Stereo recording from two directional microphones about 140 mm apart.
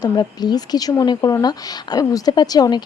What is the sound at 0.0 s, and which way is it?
A woman's voice, 30° left (ahead or behind).